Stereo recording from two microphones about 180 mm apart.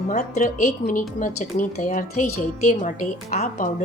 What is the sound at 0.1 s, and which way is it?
A woman's voice, 40° left (ahead or behind).